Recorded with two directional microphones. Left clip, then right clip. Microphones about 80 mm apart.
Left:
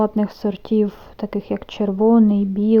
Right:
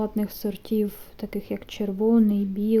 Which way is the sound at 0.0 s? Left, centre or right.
Left.